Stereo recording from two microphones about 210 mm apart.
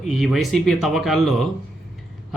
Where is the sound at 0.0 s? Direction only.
Centre (ahead or behind).